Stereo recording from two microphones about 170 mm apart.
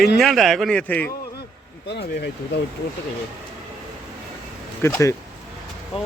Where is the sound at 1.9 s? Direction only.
80° left.